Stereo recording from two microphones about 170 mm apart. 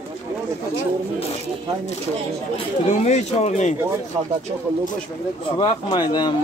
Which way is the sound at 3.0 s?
40° left (ahead or behind).